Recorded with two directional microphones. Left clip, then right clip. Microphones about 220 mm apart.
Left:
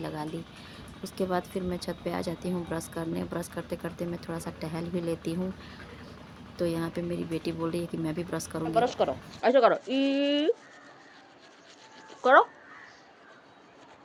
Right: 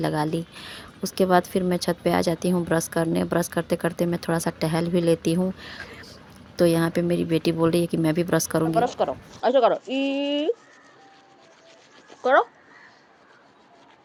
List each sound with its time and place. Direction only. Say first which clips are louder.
0.0 s a woman's voice: right 11 dB; 35° right (ahead or behind)
8.7 s speech: left 1 dB; 10° right (ahead or behind)
12.2 s speech: right 1 dB; centre (ahead or behind)